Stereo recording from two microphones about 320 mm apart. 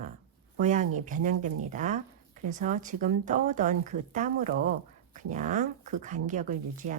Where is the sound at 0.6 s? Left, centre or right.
Right.